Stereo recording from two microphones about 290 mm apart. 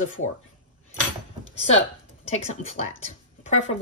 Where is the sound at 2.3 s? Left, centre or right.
Left.